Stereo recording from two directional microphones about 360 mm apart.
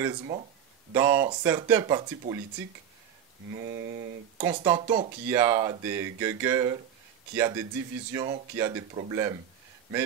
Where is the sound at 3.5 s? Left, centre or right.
Right.